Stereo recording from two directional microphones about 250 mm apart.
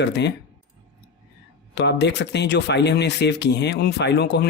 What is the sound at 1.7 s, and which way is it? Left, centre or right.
A man's voice, left.